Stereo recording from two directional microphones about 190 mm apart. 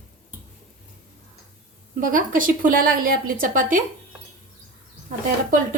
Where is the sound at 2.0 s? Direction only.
45° right (ahead or behind).